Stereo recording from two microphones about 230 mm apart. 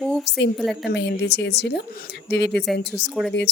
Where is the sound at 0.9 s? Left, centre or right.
Left.